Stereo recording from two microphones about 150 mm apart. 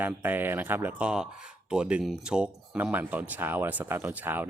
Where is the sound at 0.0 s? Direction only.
10° right (ahead or behind).